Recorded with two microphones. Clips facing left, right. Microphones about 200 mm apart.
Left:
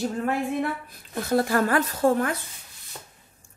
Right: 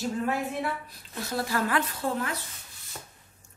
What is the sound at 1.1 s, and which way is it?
Speech, 55° left (ahead or behind).